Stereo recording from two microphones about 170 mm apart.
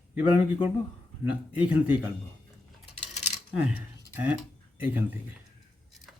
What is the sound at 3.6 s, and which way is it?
Speech, 10° right (ahead or behind).